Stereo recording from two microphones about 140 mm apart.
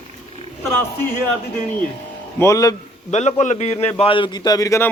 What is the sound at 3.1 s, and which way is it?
Speech, 55° left (ahead or behind).